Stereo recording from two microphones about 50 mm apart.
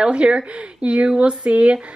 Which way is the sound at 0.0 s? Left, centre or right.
Right.